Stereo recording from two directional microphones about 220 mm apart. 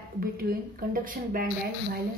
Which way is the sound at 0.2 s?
40° right (ahead or behind).